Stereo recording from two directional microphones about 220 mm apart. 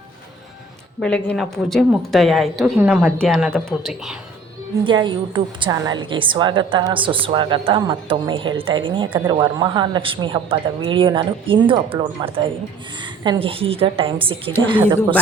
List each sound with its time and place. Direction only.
1.0 s a woman's voice: 5° left (ahead or behind)
4.9 s a woman's voice: 20° right (ahead or behind)